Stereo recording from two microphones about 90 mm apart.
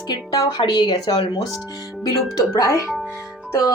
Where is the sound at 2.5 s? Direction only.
40° left (ahead or behind).